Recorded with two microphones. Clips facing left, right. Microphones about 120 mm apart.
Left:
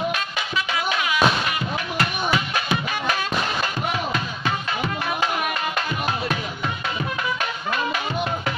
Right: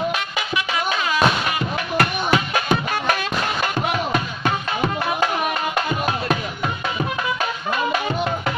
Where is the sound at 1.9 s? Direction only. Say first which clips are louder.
Right 5 dB; 50° right (ahead or behind).